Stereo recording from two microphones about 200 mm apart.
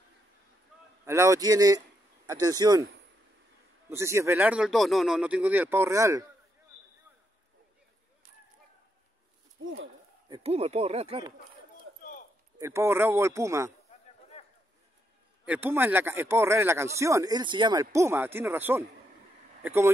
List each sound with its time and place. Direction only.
1.0 s a man's voice: 15° right (ahead or behind)
3.9 s speech: 15° right (ahead or behind)
9.6 s a sound: 80° right
10.3 s speech: 30° right (ahead or behind)
12.0 s a sound: 45° left (ahead or behind)
12.5 s speech: 15° right (ahead or behind)
15.4 s speech: 10° right (ahead or behind)